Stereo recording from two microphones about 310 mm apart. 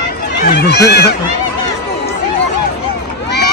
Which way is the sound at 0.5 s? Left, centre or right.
Left.